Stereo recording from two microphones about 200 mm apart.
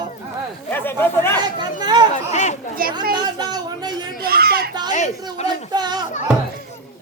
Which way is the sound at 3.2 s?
20° right (ahead or behind).